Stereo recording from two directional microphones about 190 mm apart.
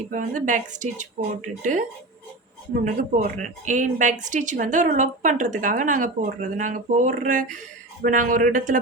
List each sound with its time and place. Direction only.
0.1 s a woman's voice: 45° right (ahead or behind)
2.8 s a woman's voice: 40° right (ahead or behind)